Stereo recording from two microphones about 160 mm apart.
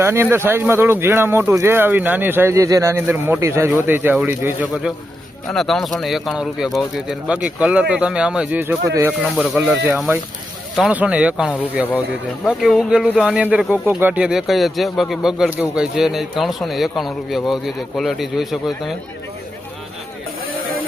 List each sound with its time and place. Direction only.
0.0 s speech: 15° right (ahead or behind)
9.3 s speech: centre (ahead or behind)